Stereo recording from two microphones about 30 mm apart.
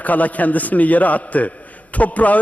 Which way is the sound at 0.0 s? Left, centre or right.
Left.